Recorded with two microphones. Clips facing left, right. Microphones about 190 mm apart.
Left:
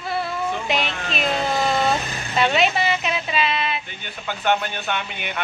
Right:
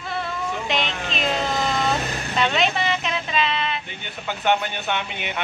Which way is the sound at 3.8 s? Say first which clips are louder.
Even; 20° right (ahead or behind).